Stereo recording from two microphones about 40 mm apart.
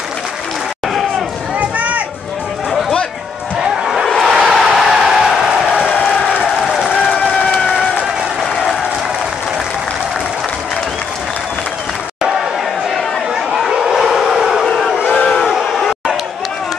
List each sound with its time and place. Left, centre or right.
1.6 s a sound: right
3.5 s a sound: centre
5.6 s music: centre
6.6 s run: centre
13.7 s howl: centre
15.0 s crowd: left